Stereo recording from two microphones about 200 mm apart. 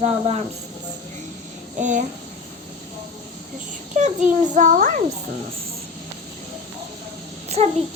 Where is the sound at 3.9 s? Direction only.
35° right (ahead or behind).